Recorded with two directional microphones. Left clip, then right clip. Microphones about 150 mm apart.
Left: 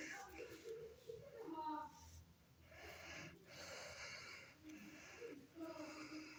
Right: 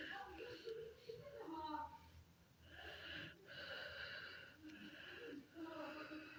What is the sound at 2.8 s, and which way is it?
Wheeze, 50° left (ahead or behind).